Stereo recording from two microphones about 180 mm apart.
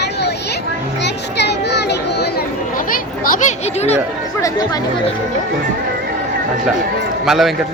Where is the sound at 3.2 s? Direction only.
45° left (ahead or behind).